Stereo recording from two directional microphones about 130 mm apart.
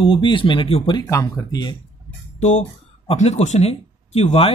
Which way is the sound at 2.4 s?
60° left (ahead or behind).